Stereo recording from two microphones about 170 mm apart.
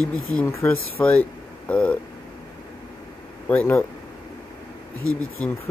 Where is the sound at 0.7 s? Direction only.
5° left (ahead or behind).